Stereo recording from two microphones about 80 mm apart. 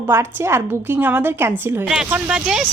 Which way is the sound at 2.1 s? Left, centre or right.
Centre.